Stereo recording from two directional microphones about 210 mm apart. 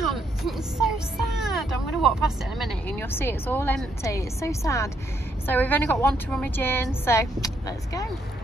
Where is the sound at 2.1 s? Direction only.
Centre (ahead or behind); by 8.0 s 15° left (ahead or behind).